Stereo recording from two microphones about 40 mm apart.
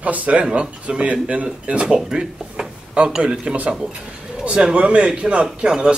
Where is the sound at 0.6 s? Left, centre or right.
Right.